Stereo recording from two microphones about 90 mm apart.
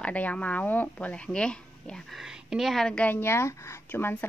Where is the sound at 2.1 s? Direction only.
5° right (ahead or behind).